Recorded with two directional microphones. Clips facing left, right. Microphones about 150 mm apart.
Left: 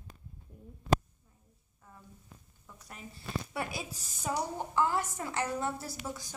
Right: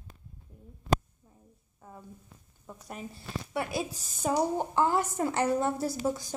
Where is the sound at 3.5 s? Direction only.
20° right (ahead or behind).